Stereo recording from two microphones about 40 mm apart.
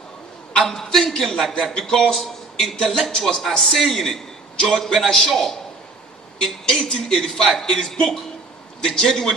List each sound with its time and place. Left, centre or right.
0.6 s a man's voice: centre
2.7 s speech: centre
6.4 s speech: centre